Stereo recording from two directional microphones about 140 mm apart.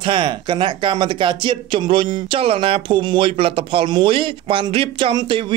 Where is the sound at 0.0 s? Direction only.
35° right (ahead or behind).